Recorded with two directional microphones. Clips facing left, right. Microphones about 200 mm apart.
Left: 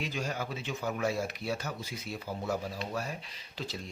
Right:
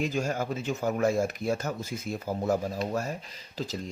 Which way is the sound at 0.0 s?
45° right (ahead or behind).